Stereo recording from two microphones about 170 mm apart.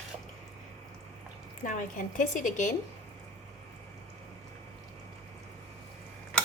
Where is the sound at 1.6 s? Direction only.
50° left (ahead or behind).